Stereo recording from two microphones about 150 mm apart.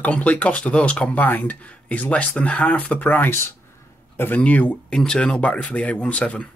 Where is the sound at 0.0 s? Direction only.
10° left (ahead or behind).